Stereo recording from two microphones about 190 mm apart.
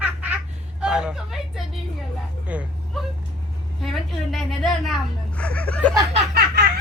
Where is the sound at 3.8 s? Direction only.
Centre (ahead or behind).